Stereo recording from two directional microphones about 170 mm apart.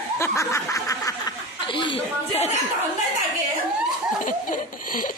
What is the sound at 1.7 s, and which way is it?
Speech, 30° left (ahead or behind).